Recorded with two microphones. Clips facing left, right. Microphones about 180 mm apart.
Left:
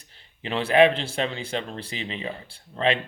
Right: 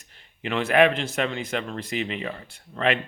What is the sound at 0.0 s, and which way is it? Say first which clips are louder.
A man's voice: right 3 dB; 30° left (ahead or behind).